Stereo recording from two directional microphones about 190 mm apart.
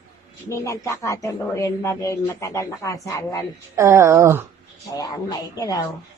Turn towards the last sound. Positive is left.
turn(degrees=20)  # may be behind; listen again after turning